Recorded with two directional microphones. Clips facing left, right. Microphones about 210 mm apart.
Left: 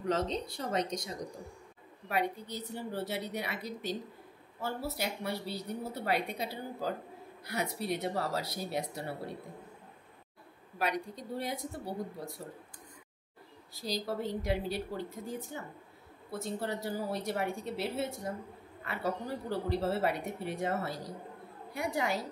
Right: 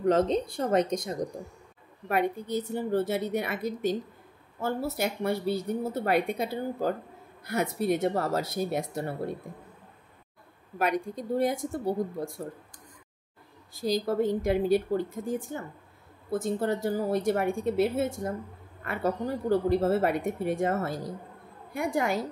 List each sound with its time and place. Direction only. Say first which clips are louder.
0.0 s speech: right 8 dB; 50° right (ahead or behind)
10.8 s speech: right 6 dB; 50° right (ahead or behind)
13.7 s speech: right 9 dB; 50° right (ahead or behind)